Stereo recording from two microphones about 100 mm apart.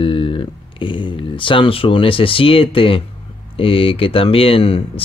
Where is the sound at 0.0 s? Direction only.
65° left (ahead or behind).